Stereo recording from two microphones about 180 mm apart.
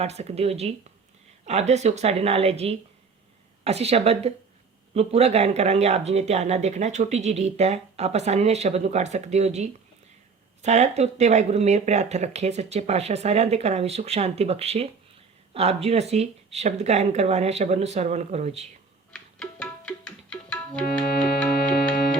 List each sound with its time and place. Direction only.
0.0 s speech: 35° right (ahead or behind)
19.1 s tabla: 5° left (ahead or behind)